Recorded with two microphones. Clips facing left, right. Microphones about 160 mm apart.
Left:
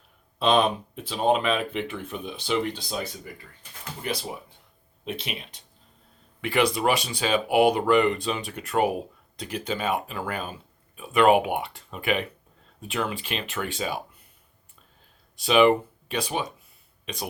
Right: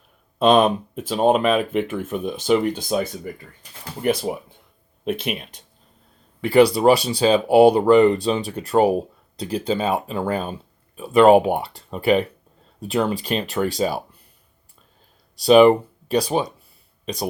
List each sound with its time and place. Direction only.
0.3 s speech: 45° right (ahead or behind)
6.4 s speech: 35° right (ahead or behind)
15.4 s speech: 35° right (ahead or behind)